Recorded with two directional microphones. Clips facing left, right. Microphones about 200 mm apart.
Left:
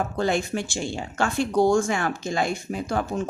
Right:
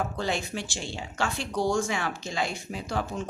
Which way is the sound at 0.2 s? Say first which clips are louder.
Left 6 dB; 50° left (ahead or behind).